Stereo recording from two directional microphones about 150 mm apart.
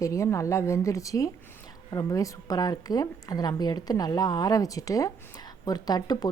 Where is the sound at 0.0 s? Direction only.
20° left (ahead or behind).